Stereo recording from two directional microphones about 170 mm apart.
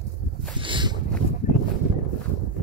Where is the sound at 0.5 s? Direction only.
30° right (ahead or behind).